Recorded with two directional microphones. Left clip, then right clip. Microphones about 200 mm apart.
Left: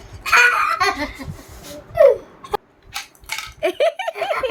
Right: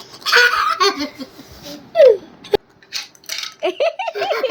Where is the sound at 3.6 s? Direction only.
10° left (ahead or behind).